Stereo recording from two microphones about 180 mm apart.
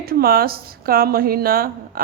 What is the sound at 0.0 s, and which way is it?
A woman's voice, 55° right (ahead or behind).